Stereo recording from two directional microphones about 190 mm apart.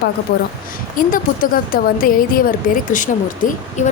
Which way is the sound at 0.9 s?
45° left (ahead or behind).